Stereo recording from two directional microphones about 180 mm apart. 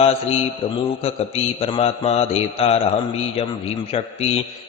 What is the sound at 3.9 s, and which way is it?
Speech, 35° left (ahead or behind).